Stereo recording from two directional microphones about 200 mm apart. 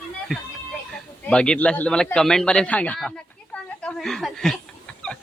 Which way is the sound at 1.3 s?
5° left (ahead or behind).